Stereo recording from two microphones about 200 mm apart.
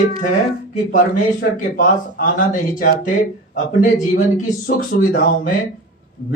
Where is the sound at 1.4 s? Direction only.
45° left (ahead or behind).